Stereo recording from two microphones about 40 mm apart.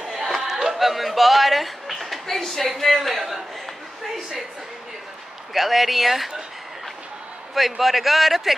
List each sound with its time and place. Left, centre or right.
0.0 s a sound: centre
0.7 s a man's voice: centre
5.5 s a man's voice: centre
7.5 s a man's voice: centre